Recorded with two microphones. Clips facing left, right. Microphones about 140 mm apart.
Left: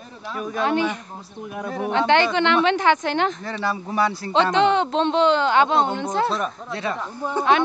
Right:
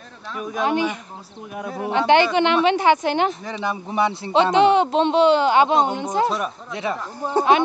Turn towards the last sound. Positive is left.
turn(degrees=-35)  # may be behind; listen again after turning